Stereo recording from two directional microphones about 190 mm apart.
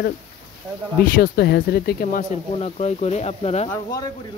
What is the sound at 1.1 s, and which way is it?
Speech, 55° left (ahead or behind).